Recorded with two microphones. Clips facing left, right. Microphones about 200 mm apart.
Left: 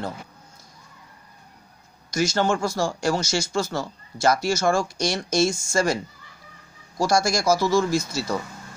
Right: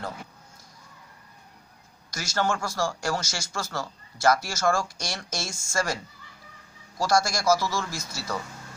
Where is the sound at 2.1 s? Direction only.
20° left (ahead or behind).